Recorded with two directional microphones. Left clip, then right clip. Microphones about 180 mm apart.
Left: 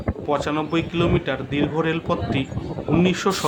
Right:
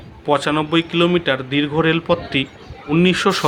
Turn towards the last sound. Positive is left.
turn(degrees=-20)  # may be behind; listen again after turning